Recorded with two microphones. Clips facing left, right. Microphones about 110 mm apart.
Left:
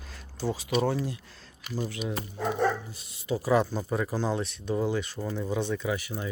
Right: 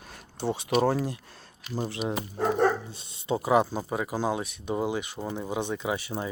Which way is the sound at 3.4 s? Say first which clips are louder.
Right 1 dB; 15° right (ahead or behind).